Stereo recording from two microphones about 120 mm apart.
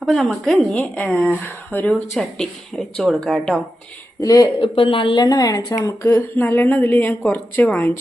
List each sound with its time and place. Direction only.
0.0 s a woman's voice: centre (ahead or behind)
2.1 s speech: centre (ahead or behind)
4.2 s speech: 30° left (ahead or behind)
4.6 s a woman's voice: 45° left (ahead or behind); by 6.1 s 25° left (ahead or behind)
6.1 s a woman's voice: 15° left (ahead or behind)